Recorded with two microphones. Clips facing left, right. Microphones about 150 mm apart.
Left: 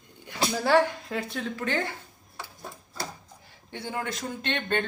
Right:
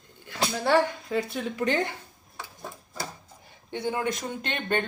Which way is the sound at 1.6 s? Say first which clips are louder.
Right 4 dB; 15° right (ahead or behind).